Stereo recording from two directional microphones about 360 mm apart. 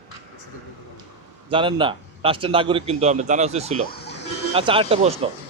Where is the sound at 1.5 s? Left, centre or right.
Centre.